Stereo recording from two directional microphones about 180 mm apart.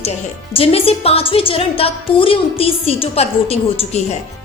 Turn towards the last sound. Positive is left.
turn(degrees=35)  # may be behind; listen again after turning